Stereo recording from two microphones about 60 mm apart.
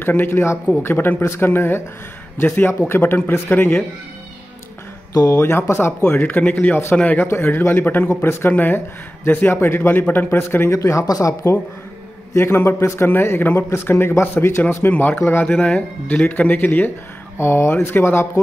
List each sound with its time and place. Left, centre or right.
0.0 s speech: left
5.4 s speech: left
6.2 s speech: left
10.7 s speech: left
12.4 s speech: left
15.4 s speech: centre; by 18.4 s left